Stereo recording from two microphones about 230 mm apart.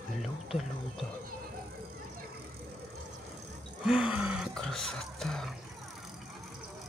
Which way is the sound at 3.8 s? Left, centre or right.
Centre.